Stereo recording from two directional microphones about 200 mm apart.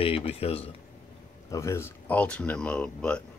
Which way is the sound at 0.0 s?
30° left (ahead or behind).